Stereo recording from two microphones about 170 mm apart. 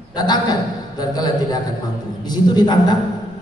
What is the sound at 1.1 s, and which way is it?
A man's voice, 25° left (ahead or behind).